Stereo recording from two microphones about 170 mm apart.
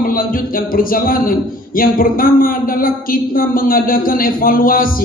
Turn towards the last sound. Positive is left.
turn(degrees=55)  # may be behind; listen again after turning